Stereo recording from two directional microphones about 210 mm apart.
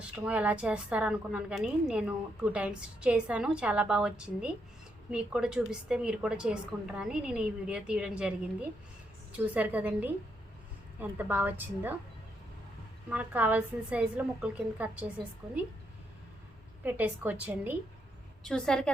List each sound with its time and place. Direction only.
0.3 s a woman's voice: 5° right (ahead or behind)
9.3 s a woman's voice: 5° right (ahead or behind)
11.2 s a woman's voice: 10° right (ahead or behind)
13.1 s a woman's voice: 5° right (ahead or behind)
16.8 s a woman's voice: 10° right (ahead or behind)
18.4 s a woman's voice: 5° left (ahead or behind)